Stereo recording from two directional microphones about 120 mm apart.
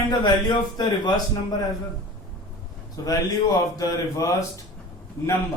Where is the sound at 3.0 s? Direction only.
30° left (ahead or behind).